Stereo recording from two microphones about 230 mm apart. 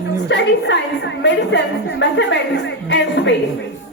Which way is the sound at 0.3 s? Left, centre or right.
Left.